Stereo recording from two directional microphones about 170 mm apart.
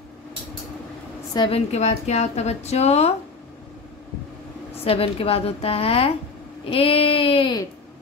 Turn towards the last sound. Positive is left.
turn(degrees=25)  # may be behind; listen again after turning